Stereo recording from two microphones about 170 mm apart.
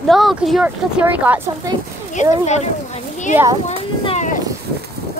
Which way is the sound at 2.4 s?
40° left (ahead or behind).